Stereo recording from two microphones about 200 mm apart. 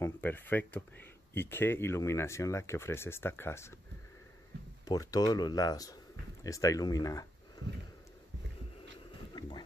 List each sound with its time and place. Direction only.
0.0 s speech: 10° left (ahead or behind)
4.8 s speech: 20° left (ahead or behind)